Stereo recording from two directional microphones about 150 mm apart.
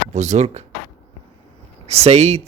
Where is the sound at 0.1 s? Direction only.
50° right (ahead or behind).